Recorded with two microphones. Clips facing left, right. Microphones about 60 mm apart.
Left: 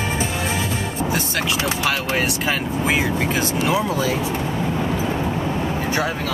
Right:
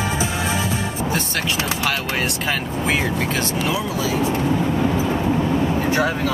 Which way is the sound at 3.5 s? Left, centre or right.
Left.